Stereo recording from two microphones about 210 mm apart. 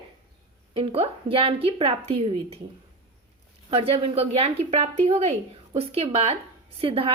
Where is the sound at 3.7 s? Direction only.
25° right (ahead or behind).